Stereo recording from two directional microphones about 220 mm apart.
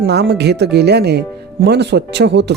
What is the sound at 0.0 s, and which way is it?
Speech, 45° right (ahead or behind).